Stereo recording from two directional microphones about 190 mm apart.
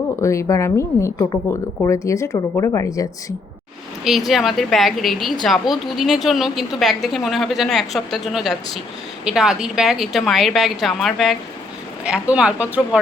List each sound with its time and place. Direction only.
0.2 s speech: 15° left (ahead or behind)
4.3 s a woman's voice: centre (ahead or behind)